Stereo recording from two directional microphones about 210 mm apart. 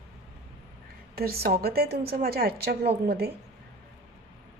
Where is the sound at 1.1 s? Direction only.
45° right (ahead or behind).